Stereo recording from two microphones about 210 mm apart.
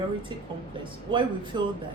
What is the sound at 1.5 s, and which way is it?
Speech, 20° right (ahead or behind).